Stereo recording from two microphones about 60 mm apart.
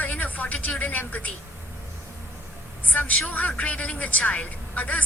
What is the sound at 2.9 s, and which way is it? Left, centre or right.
A woman's voice, left.